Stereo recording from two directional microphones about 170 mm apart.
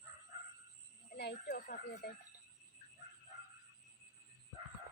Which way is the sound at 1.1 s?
65° left (ahead or behind).